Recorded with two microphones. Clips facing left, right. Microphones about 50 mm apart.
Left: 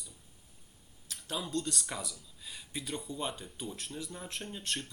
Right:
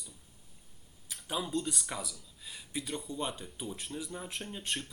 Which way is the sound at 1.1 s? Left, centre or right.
Centre.